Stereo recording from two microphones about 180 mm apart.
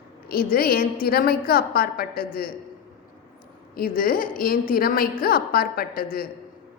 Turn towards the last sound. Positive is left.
turn(degrees=55)  # may be behind; listen again after turning